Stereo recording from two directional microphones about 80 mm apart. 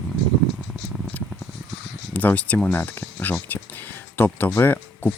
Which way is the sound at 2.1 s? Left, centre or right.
Centre.